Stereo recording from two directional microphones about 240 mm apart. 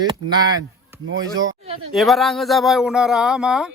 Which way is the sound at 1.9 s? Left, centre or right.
Centre.